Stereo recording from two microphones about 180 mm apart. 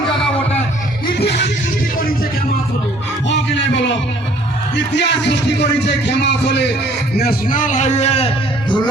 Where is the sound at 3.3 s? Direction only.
80° left.